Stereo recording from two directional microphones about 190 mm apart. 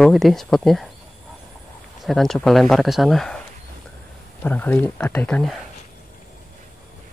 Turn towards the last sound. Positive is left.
turn(degrees=5)  # may be behind; listen again after turning